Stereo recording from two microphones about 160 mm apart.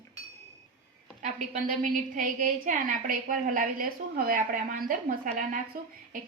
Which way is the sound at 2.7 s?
55° right (ahead or behind).